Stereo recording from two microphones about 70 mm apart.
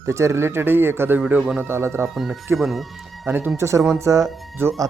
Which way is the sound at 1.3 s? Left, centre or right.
Right.